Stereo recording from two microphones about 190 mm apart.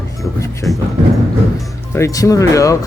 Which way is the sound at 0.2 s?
15° left (ahead or behind).